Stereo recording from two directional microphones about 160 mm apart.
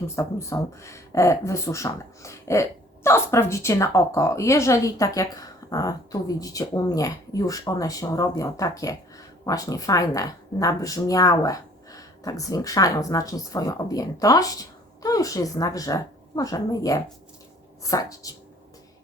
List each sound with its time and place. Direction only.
0.2 s speech: 20° left (ahead or behind)